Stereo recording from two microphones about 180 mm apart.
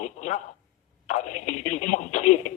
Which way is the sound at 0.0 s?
40° left (ahead or behind).